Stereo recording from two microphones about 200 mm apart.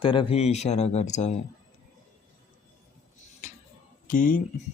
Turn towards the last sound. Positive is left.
turn(degrees=40)  # may be behind; listen again after turning